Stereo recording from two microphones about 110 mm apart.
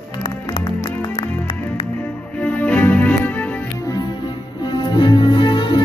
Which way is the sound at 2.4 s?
15° left (ahead or behind).